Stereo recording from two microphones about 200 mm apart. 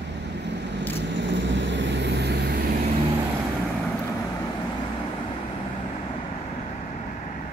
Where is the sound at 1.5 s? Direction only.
60° right (ahead or behind).